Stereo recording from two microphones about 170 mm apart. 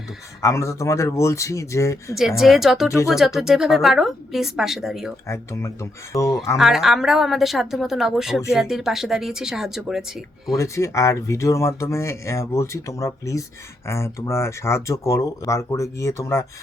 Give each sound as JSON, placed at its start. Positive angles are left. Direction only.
{"t": 0.4, "sound": "speech", "side_deg": 15}
{"t": 2.1, "sound": "speech", "side_deg": 0}
{"t": 5.3, "sound": "speech", "side_deg": 15}
{"t": 6.6, "sound": "speech", "side_deg": 0}
{"t": 10.6, "sound": "speech", "side_deg": 15}